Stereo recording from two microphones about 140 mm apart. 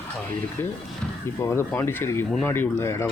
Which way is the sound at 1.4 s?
20° left (ahead or behind).